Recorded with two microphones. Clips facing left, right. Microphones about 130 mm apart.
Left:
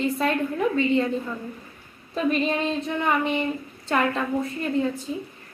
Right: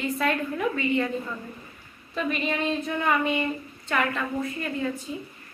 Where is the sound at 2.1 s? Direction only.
35° left (ahead or behind).